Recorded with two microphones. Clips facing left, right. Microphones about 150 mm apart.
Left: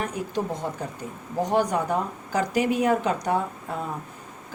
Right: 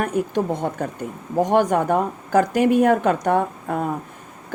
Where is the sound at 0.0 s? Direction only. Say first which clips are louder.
Right 7 dB; 55° right (ahead or behind).